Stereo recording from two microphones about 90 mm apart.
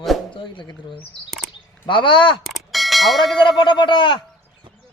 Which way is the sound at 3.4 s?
65° left (ahead or behind).